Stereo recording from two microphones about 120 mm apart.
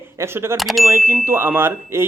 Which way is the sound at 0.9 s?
20° right (ahead or behind).